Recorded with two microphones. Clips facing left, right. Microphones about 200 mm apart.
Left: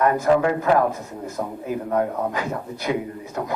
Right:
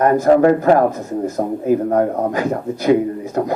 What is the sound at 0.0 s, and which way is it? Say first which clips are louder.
A man's voice: right 6 dB; 40° right (ahead or behind).